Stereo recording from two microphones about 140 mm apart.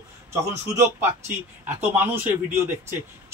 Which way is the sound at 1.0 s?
15° right (ahead or behind).